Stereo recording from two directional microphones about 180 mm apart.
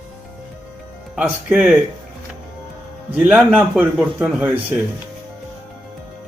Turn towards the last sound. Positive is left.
turn(degrees=-10)  # may be behind; listen again after turning